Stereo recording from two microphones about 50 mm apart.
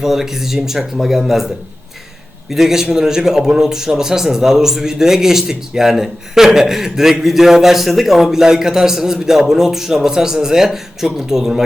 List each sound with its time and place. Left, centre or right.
0.0 s a man's voice: centre
2.5 s a man's voice: centre